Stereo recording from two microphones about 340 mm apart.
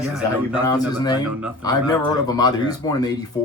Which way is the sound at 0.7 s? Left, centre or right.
Centre.